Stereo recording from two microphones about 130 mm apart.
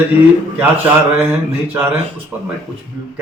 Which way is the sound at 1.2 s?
15° right (ahead or behind).